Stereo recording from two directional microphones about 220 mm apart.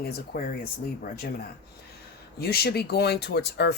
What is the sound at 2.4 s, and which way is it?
Speech, 45° left (ahead or behind).